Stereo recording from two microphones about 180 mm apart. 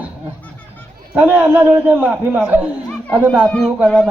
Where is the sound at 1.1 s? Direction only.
10° right (ahead or behind).